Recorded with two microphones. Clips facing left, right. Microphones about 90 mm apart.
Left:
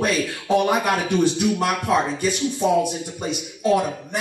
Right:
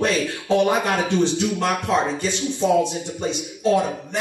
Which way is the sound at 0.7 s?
25° right (ahead or behind).